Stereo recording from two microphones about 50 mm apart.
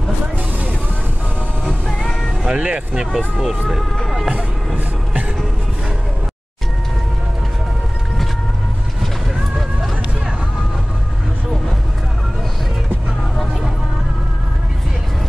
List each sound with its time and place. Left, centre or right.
1.6 s music: centre
2.4 s speech: right
2.9 s speech: centre
9.0 s a sound: centre